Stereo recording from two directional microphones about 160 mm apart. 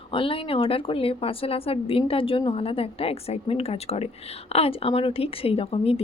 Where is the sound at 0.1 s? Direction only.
35° left (ahead or behind).